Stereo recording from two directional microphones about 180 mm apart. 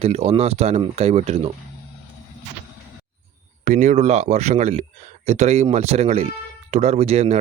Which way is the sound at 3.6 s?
45° right (ahead or behind).